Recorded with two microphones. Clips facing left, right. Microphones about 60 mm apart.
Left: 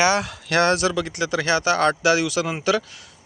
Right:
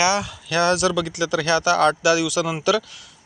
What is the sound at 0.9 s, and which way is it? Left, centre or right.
Speech, left.